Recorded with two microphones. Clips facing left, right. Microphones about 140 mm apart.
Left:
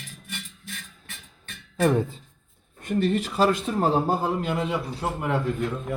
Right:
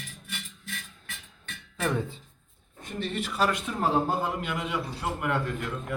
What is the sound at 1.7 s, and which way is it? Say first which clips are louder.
Speech: left 8 dB; 35° left (ahead or behind).